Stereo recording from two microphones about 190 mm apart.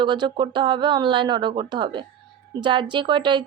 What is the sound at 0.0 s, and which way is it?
A woman's voice, 25° right (ahead or behind).